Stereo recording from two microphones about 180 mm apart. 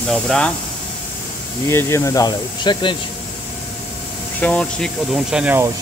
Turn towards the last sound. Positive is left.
turn(degrees=-10)  # may be behind; listen again after turning